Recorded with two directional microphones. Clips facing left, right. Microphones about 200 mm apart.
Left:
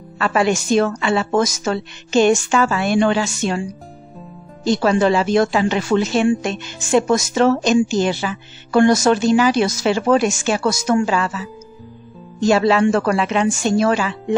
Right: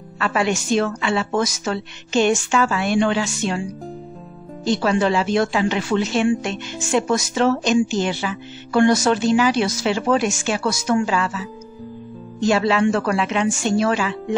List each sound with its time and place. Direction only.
0.2 s a woman's voice: 40° left (ahead or behind)
4.6 s speech: 40° left (ahead or behind)
12.4 s speech: 40° left (ahead or behind)